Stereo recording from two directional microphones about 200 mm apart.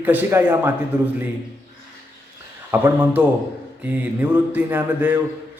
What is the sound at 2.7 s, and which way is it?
Speech, 10° right (ahead or behind).